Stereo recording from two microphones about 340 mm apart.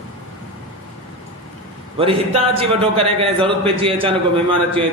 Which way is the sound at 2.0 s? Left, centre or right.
Centre.